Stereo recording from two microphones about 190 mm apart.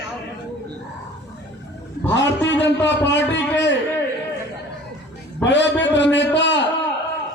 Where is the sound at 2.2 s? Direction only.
70° left (ahead or behind).